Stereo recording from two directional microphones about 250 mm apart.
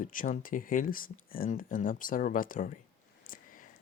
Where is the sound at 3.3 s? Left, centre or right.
Left.